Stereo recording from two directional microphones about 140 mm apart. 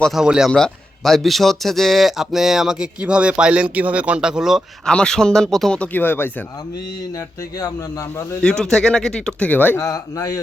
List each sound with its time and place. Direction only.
0.0 s a man's voice: centre (ahead or behind); by 6.4 s 15° left (ahead or behind)
7.2 s speech: 25° left (ahead or behind)
8.4 s a man's voice: 5° left (ahead or behind)
9.8 s speech: 25° left (ahead or behind)